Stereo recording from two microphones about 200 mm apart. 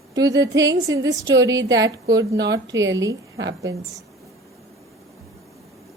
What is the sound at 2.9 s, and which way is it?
Speech, 15° right (ahead or behind).